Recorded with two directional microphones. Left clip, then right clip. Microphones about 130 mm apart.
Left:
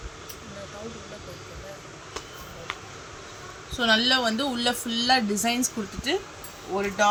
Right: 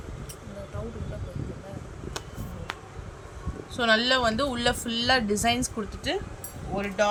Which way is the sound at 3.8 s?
40° right (ahead or behind).